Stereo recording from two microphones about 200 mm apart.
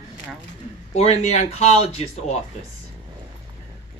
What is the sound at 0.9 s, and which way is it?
Speech, 30° left (ahead or behind).